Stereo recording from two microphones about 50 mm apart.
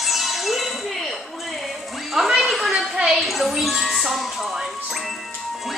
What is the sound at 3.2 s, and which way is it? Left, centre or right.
Music, centre.